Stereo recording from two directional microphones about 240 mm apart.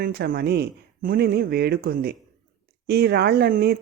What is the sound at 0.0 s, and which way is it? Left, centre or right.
Speech, right.